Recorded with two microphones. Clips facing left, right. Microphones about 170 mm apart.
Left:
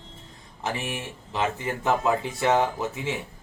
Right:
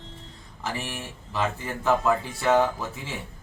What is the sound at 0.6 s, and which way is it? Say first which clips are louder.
Speech: left 2 dB; 20° left (ahead or behind).